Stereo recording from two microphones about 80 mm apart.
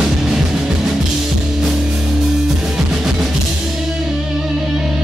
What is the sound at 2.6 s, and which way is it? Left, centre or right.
Music, centre.